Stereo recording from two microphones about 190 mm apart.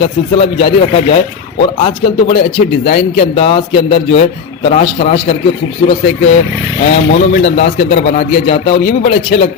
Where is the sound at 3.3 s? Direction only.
30° left (ahead or behind).